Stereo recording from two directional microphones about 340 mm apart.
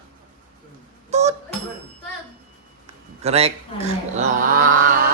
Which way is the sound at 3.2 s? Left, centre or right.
Centre.